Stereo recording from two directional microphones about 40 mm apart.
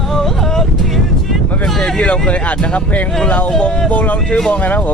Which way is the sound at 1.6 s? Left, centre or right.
Left.